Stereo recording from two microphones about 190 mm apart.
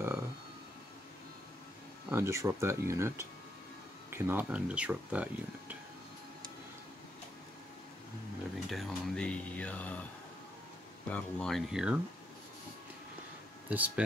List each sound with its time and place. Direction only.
2.0 s speech: 15° right (ahead or behind)
8.6 s speech: centre (ahead or behind)
11.1 s speech: 5° left (ahead or behind)
13.7 s speech: 10° right (ahead or behind)